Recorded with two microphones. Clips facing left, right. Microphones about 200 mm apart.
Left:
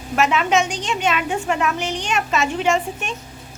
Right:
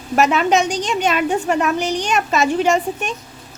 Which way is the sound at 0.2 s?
40° right (ahead or behind).